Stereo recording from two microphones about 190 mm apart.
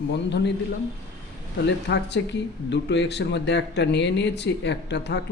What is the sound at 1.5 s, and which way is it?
Speech, 65° left (ahead or behind).